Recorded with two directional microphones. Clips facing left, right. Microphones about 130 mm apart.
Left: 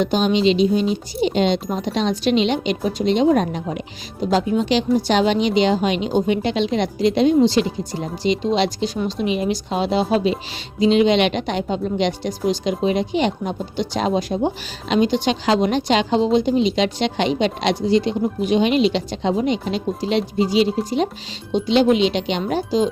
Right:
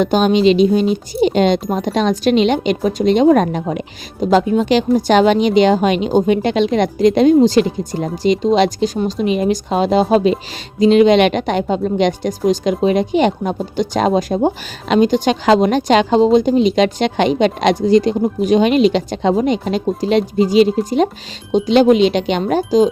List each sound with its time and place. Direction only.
0.0 s speech: 50° right (ahead or behind)